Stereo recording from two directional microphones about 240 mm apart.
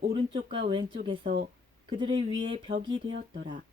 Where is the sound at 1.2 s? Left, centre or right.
Right.